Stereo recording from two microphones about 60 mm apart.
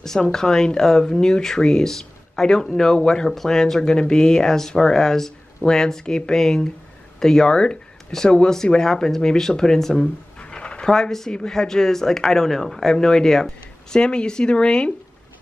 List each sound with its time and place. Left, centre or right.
0.0 s speech: centre
10.4 s a sound: centre
10.9 s speech: centre